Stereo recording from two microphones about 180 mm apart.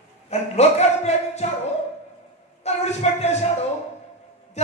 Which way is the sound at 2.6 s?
40° left (ahead or behind).